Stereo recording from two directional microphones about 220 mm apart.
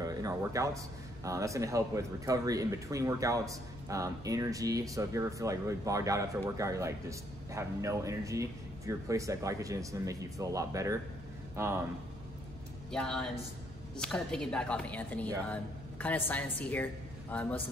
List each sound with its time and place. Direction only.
0.0 s a sound: 15° right (ahead or behind)
1.2 s speech: 15° right (ahead or behind)
12.9 s speech: 5° left (ahead or behind)